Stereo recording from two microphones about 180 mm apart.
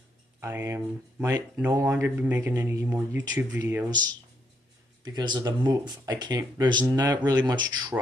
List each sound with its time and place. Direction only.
0.4 s speech: 15° right (ahead or behind)
5.0 s speech: 25° right (ahead or behind)